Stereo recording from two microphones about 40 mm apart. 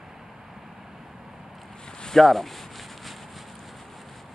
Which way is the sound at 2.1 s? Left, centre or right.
Centre.